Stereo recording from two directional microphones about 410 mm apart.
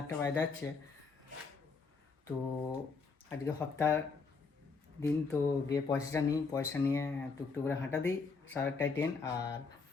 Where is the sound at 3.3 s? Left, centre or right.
Centre.